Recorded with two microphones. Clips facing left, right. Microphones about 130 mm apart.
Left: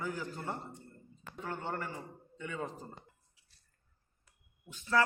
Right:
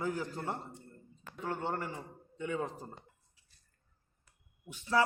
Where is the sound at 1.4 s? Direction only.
25° right (ahead or behind).